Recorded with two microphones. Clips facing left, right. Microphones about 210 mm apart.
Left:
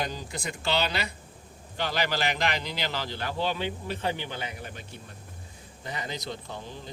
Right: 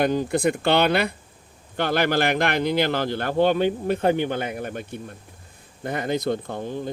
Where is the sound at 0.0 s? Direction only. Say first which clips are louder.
Right 13 dB; 55° right (ahead or behind).